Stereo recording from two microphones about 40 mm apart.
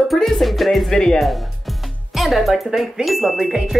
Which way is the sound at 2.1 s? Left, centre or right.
Centre.